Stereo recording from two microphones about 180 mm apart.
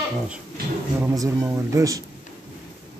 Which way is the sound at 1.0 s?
15° right (ahead or behind).